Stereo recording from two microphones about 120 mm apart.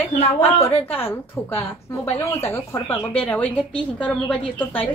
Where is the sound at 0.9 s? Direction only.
15° left (ahead or behind).